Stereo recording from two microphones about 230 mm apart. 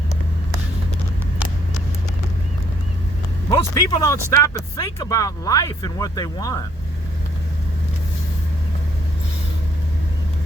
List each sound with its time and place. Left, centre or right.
3.5 s speech: centre